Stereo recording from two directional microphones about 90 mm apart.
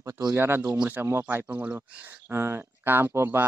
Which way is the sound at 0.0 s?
35° right (ahead or behind).